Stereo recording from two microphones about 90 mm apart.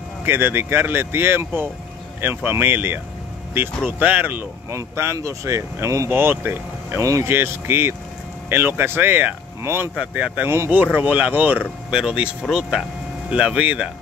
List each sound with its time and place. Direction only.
0.2 s speech: 25° right (ahead or behind)
4.6 s speech: 30° right (ahead or behind)
7.0 s speech: 40° right (ahead or behind)
7.2 s speech: 25° right (ahead or behind)
9.9 s speech: 15° right (ahead or behind)
11.9 s speech: 5° right (ahead or behind)